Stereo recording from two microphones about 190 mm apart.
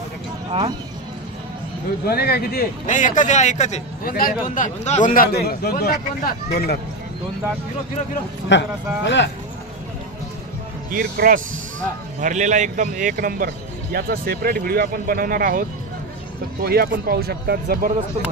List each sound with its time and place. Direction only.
0.5 s speech: 25° right (ahead or behind)
2.0 s speech: 55° left (ahead or behind)
3.0 s a man's voice: 40° left (ahead or behind); by 6.8 s 55° left (ahead or behind)
8.5 s a man's voice: 70° left (ahead or behind)
10.9 s speech: 50° right (ahead or behind)
16.6 s speech: 55° right (ahead or behind)